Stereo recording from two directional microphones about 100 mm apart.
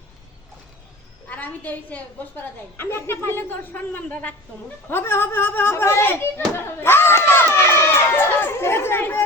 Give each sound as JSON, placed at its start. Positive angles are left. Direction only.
{"t": 1.3, "sound": "a woman's voice", "side_deg": 15}
{"t": 7.3, "sound": "chatter", "side_deg": 25}